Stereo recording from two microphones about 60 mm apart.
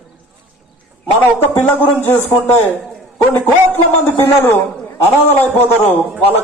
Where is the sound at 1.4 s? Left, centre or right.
Left.